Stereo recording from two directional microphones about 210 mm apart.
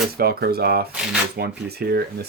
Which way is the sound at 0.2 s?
50° right (ahead or behind).